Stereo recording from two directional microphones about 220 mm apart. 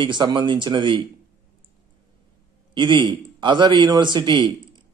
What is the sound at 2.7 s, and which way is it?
A man's voice, 20° right (ahead or behind).